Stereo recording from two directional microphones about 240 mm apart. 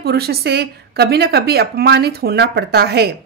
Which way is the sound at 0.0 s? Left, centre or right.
Right.